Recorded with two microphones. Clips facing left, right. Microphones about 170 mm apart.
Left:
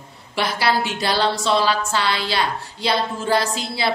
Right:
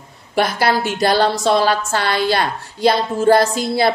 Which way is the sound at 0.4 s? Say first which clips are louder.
Right 4 dB; 45° right (ahead or behind).